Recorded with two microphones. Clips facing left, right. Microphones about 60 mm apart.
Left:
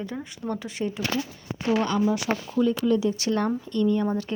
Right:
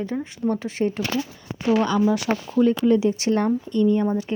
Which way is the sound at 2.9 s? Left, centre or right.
Right.